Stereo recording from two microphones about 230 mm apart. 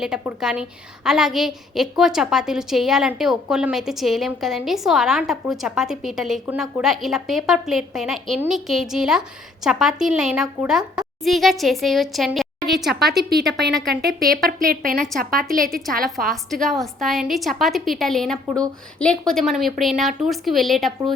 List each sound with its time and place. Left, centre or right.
0.0 s a woman's voice: centre
14.6 s a woman's voice: right
16.3 s a woman's voice: centre